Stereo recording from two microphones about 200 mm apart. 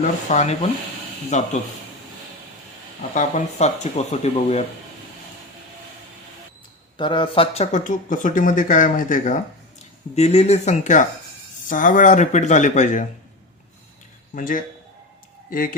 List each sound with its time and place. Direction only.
0.3 s speech: 35° left (ahead or behind)
3.2 s speech: 35° left (ahead or behind)
6.9 s speech: 25° left (ahead or behind)
14.3 s speech: 40° left (ahead or behind)